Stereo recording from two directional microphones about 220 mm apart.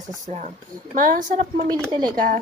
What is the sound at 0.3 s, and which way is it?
A woman's voice, 30° right (ahead or behind).